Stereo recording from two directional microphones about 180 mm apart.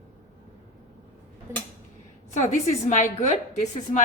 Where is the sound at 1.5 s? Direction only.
15° right (ahead or behind).